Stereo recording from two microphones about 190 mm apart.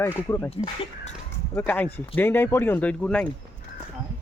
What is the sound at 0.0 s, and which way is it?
Speech, 15° left (ahead or behind).